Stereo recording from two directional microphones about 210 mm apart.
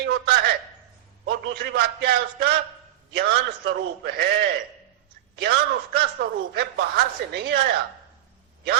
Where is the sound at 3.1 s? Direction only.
50° right (ahead or behind).